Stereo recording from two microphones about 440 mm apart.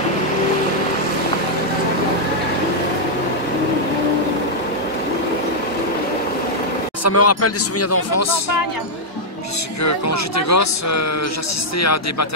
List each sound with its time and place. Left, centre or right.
7.1 s a man's voice: left
9.8 s a man's voice: left